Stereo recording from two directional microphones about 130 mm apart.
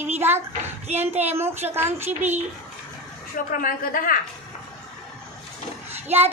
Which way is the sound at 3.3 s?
90° left.